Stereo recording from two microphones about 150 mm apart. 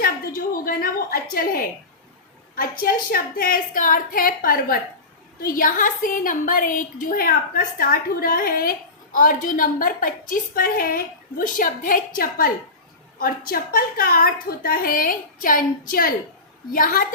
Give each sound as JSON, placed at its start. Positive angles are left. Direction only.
{"t": 0.0, "sound": "a sound", "side_deg": 75}
{"t": 2.6, "sound": "a woman's voice", "side_deg": 75}
{"t": 9.1, "sound": "a woman's voice", "side_deg": 60}